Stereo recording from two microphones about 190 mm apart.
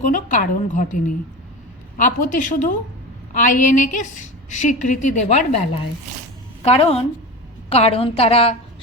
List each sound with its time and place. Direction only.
0.1 s a woman's voice: 40° left (ahead or behind)
6.6 s a woman's voice: 30° left (ahead or behind)